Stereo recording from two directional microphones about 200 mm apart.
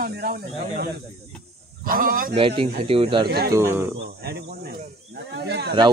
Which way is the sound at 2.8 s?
30° right (ahead or behind).